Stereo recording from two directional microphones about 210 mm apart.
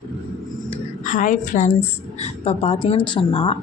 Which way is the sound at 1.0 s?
35° left (ahead or behind).